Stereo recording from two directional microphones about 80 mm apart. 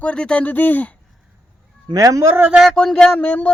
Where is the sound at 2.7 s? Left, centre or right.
Centre.